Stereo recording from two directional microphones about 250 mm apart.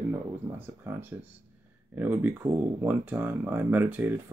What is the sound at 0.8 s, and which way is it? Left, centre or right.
Speech, centre.